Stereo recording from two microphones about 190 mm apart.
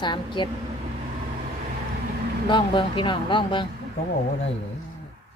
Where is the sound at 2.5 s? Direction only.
25° left (ahead or behind).